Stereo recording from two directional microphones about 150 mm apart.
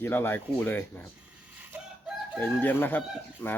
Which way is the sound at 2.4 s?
15° left (ahead or behind).